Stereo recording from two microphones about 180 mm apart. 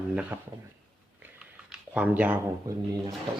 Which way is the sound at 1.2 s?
5° right (ahead or behind).